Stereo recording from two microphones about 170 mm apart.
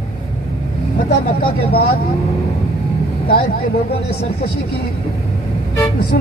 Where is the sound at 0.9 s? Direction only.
65° left (ahead or behind).